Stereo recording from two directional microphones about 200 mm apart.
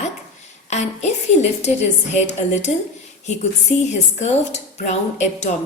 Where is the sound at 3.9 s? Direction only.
35° left (ahead or behind).